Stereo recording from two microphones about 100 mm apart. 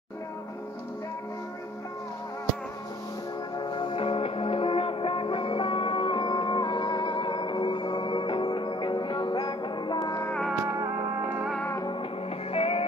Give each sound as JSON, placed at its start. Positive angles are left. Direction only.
{"t": 3.5, "sound": "music", "side_deg": 50}
{"t": 10.6, "sound": "music", "side_deg": -30}
{"t": 11.2, "sound": "music", "side_deg": -15}
{"t": 12.5, "sound": "music", "side_deg": 75}